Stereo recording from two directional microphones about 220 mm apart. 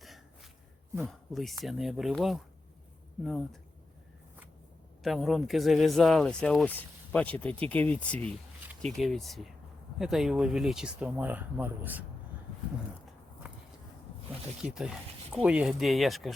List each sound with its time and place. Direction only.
0.9 s speech: 5° right (ahead or behind)
5.0 s speech: centre (ahead or behind)
14.6 s speech: 5° right (ahead or behind)